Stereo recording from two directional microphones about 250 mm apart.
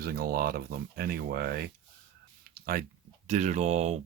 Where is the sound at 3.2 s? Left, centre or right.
Right.